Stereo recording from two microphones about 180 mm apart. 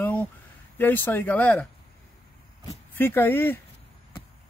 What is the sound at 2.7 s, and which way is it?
Speech, 10° left (ahead or behind).